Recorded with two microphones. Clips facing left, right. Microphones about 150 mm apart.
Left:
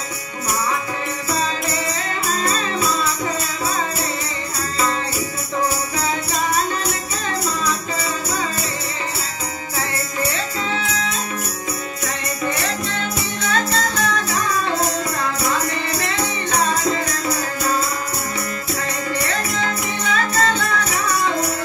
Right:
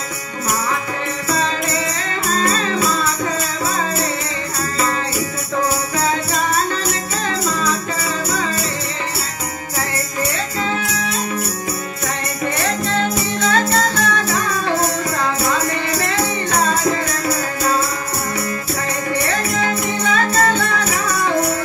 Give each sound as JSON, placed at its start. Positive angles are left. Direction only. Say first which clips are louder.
{"t": 2.3, "sound": "music", "louder": "right 5 dB", "side_deg": -50}
{"t": 12.6, "sound": "music", "louder": "right 5 dB", "side_deg": -60}
{"t": 19.3, "sound": "music", "louder": "right 3 dB", "side_deg": -55}